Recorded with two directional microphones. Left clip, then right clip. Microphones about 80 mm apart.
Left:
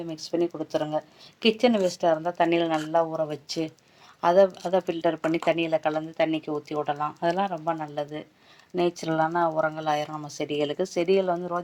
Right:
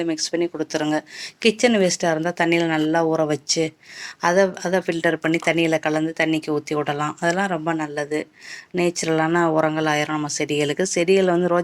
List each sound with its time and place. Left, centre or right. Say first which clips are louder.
0.0 s speech: right 5 dB; right